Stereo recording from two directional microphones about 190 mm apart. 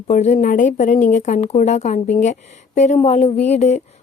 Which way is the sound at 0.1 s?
35° left (ahead or behind).